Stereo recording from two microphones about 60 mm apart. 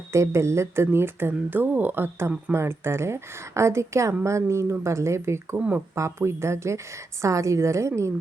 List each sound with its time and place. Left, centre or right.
0.1 s speech: right
0.9 s a woman's voice: right